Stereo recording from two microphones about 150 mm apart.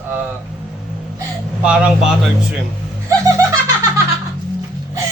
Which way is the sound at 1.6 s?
5° right (ahead or behind).